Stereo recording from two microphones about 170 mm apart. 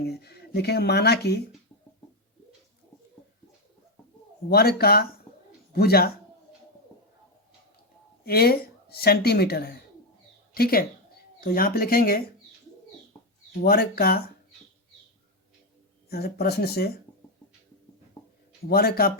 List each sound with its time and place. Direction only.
0.0 s speech: 70° left (ahead or behind)
4.4 s speech: 65° left (ahead or behind)
8.2 s speech: 65° left (ahead or behind)
13.6 s speech: 70° left (ahead or behind)
16.0 s speech: 70° left (ahead or behind)
18.7 s speech: 65° left (ahead or behind)